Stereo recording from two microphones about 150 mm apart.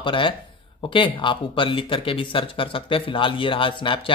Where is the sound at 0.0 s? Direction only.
35° left (ahead or behind).